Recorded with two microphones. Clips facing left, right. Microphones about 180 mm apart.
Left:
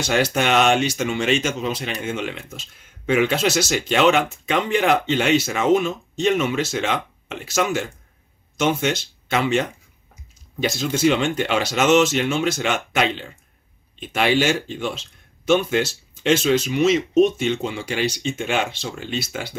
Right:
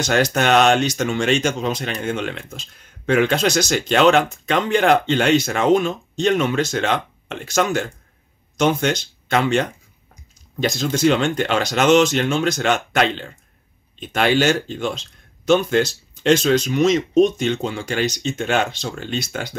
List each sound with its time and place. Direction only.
0.0 s speech: 5° left (ahead or behind)
14.8 s a sound: 5° left (ahead or behind)
15.7 s speech: 5° left (ahead or behind)
17.6 s speech: 40° right (ahead or behind)
18.2 s speech: 10° left (ahead or behind)